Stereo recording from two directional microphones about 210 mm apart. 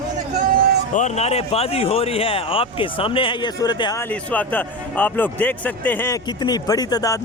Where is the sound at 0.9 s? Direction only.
35° left (ahead or behind).